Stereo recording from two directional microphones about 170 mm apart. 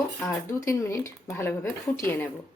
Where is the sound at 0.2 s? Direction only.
15° left (ahead or behind).